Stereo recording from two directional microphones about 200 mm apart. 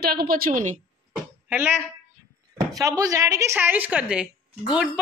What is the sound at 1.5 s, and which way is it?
Speech, 10° right (ahead or behind).